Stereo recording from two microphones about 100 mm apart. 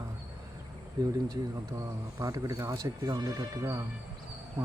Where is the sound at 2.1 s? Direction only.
35° right (ahead or behind).